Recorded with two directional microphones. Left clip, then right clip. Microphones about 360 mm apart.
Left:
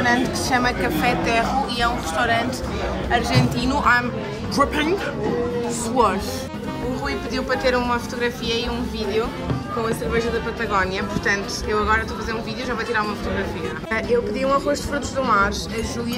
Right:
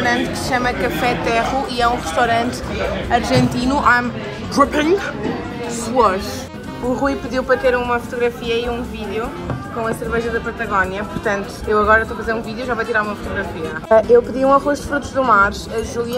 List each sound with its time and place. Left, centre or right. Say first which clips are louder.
0.0 s speech: right 2 dB; centre